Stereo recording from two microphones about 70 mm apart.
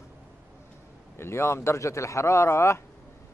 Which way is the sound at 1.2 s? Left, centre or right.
Left.